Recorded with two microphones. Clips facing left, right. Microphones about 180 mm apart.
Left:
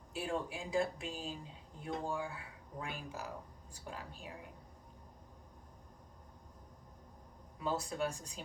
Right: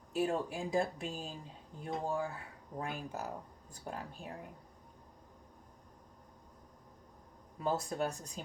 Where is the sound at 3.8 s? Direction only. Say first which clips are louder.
Right 4 dB; 45° right (ahead or behind).